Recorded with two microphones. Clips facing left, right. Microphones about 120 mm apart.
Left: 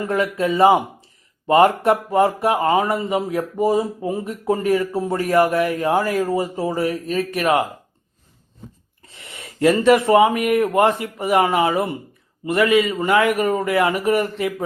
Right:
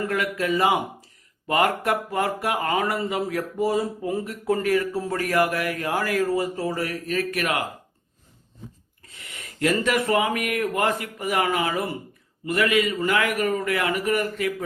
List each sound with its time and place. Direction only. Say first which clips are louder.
0.0 s speech: left 5 dB; 25° left (ahead or behind)
9.6 s speech: left 8 dB; 30° left (ahead or behind)